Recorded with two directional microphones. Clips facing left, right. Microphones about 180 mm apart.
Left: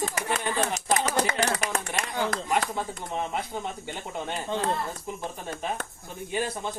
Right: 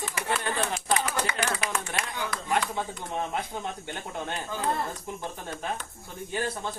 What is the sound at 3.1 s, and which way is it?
Speech, centre (ahead or behind).